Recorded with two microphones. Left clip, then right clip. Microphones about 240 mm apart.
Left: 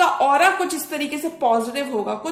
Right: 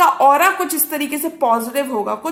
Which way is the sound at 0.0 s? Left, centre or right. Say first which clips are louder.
Right 4 dB; right.